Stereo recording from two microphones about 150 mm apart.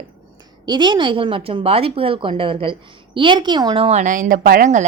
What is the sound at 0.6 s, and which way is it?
A woman's voice, 30° right (ahead or behind).